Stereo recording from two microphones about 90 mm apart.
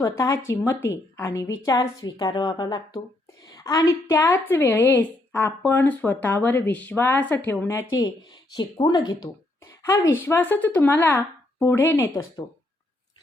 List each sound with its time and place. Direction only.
0.0 s a woman's voice: 35° left (ahead or behind); by 3.0 s 55° left (ahead or behind)
3.5 s a woman's voice: 40° left (ahead or behind)
4.2 s a woman's voice: 25° left (ahead or behind)
8.8 s a woman's voice: 40° left (ahead or behind)
9.8 s a woman's voice: 30° left (ahead or behind)